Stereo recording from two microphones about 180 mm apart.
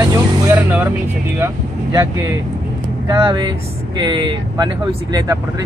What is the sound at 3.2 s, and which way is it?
Speech, 25° right (ahead or behind).